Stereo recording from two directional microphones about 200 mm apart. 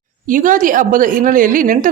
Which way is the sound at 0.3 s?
40° right (ahead or behind).